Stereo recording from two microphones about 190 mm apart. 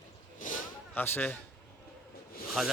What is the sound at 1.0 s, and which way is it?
Speech, 10° left (ahead or behind).